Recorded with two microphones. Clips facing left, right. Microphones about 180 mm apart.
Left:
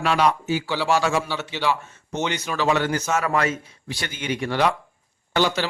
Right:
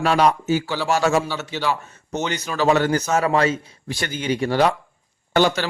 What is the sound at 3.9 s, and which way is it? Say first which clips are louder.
Speech: right 4 dB; 45° right (ahead or behind).